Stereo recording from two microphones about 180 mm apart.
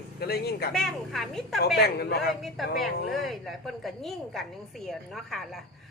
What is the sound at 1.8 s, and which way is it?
Speech, 60° left (ahead or behind).